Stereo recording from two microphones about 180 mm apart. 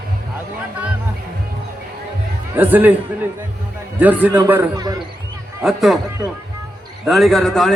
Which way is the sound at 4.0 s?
10° right (ahead or behind).